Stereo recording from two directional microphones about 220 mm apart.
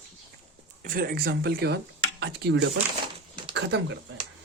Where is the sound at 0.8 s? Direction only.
40° right (ahead or behind).